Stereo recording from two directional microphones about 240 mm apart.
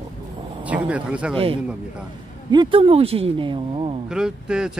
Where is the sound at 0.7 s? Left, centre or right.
Centre.